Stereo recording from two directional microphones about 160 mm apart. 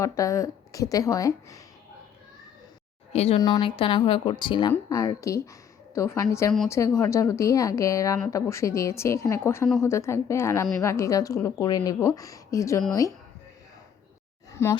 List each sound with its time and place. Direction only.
0.0 s speech: 20° left (ahead or behind)
3.1 s speech: 40° left (ahead or behind)
3.4 s a woman's voice: 30° left (ahead or behind)
14.5 s speech: 15° left (ahead or behind)